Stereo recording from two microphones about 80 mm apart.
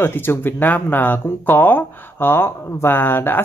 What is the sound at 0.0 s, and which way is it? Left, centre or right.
Speech, left.